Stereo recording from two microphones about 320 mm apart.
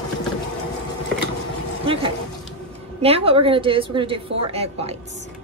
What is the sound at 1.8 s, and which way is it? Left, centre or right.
A woman's voice, centre.